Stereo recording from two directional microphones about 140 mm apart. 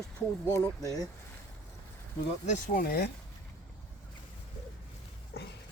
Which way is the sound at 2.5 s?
90° left.